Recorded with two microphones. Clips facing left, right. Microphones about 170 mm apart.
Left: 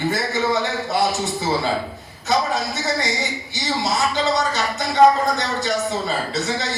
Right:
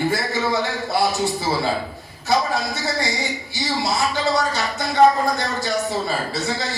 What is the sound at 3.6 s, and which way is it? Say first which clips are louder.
Speech: even; 20° left (ahead or behind).